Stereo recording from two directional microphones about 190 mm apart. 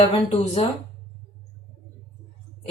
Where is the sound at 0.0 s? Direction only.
30° left (ahead or behind).